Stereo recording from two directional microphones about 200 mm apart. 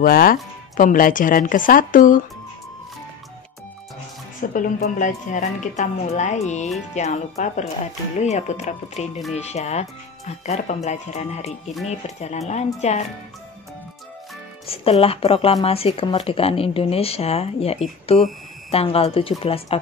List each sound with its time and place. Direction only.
0.0 s speech: 45° left (ahead or behind)
4.4 s a woman's voice: 40° left (ahead or behind)
14.7 s speech: 30° left (ahead or behind)